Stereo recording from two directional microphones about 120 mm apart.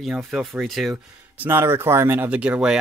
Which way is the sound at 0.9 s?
15° right (ahead or behind).